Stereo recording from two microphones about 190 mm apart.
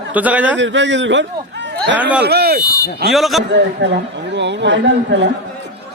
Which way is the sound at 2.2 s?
55° right (ahead or behind).